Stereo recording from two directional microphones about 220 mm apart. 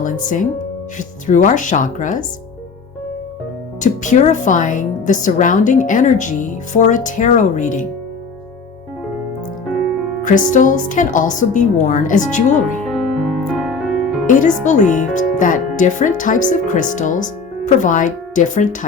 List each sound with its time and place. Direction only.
0.0 s speech: 35° left (ahead or behind)
3.8 s speech: 35° left (ahead or behind)
9.6 s music: centre (ahead or behind)
10.2 s speech: 35° left (ahead or behind)
12.9 s music: centre (ahead or behind)
14.3 s speech: 35° left (ahead or behind)